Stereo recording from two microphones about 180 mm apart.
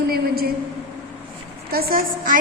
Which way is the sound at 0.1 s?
55° right (ahead or behind).